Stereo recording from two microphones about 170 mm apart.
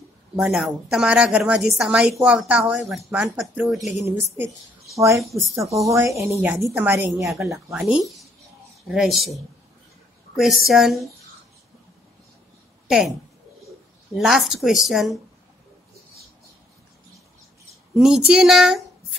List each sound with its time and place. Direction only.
0.4 s a woman's voice: centre (ahead or behind)
7.8 s a woman's voice: 5° right (ahead or behind)
12.8 s speech: 5° right (ahead or behind)
14.1 s a woman's voice: centre (ahead or behind)
17.9 s speech: centre (ahead or behind)